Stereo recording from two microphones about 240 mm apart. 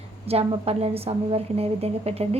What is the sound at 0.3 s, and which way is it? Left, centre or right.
A woman's voice, right.